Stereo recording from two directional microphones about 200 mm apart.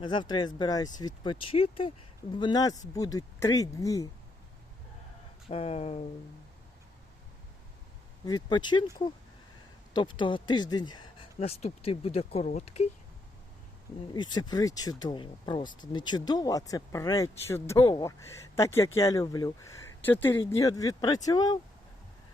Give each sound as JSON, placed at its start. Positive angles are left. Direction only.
{"t": 0.0, "sound": "speech", "side_deg": 25}
{"t": 5.5, "sound": "speech", "side_deg": 30}
{"t": 8.2, "sound": "speech", "side_deg": 20}
{"t": 9.9, "sound": "speech", "side_deg": 25}
{"t": 11.3, "sound": "speech", "side_deg": 30}
{"t": 14.1, "sound": "speech", "side_deg": 20}